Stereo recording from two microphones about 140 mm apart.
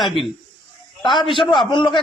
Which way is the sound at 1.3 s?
35° left (ahead or behind).